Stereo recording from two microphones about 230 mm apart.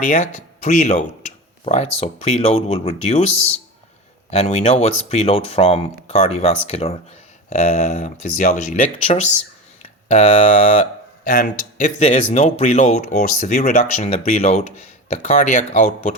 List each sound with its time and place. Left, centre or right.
0.0 s speech: left
4.3 s speech: left